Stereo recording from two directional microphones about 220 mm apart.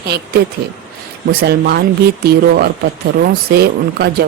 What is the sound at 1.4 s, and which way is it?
Speech, 45° right (ahead or behind).